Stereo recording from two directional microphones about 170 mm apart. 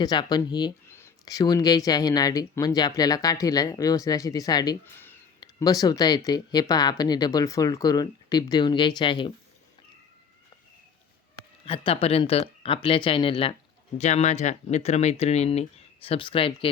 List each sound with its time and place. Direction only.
0.0 s speech: 25° left (ahead or behind)
11.6 s speech: 30° left (ahead or behind)